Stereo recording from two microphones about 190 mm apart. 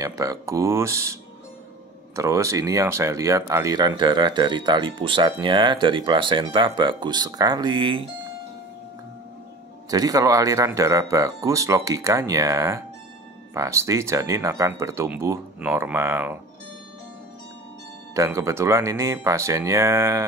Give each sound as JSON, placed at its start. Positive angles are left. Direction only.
{"t": 0.0, "sound": "speech", "side_deg": -15}
{"t": 2.1, "sound": "speech", "side_deg": -15}
{"t": 9.8, "sound": "speech", "side_deg": -20}
{"t": 18.1, "sound": "speech", "side_deg": -15}